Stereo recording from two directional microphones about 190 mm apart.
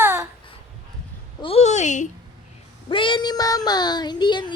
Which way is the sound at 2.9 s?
25° left (ahead or behind).